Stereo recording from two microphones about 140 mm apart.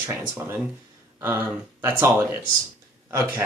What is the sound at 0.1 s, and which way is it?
Speech, 15° right (ahead or behind).